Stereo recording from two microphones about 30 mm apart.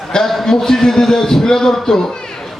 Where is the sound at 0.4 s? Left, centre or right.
Centre.